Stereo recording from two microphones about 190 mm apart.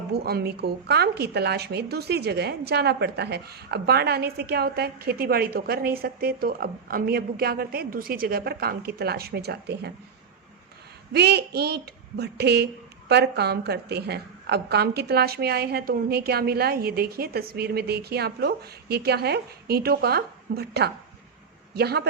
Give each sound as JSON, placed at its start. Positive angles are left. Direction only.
{"t": 0.1, "sound": "a woman's voice", "side_deg": -55}
{"t": 11.1, "sound": "a woman's voice", "side_deg": -60}